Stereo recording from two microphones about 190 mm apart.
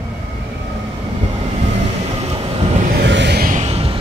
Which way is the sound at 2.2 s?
30° right (ahead or behind).